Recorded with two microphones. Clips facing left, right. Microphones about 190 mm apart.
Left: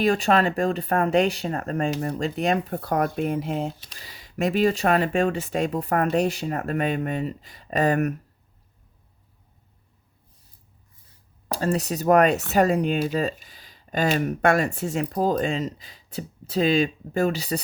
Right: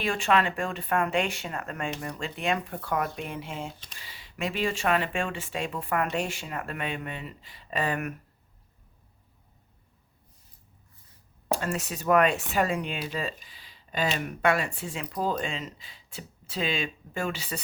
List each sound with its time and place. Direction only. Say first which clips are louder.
0.0 s speech: left 5 dB; 40° left (ahead or behind)
11.5 s speech: left 6 dB; 35° left (ahead or behind)